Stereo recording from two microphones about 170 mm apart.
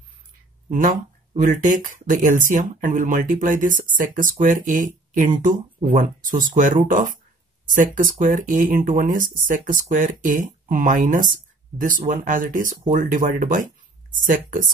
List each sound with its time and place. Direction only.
0.7 s speech: 50° right (ahead or behind)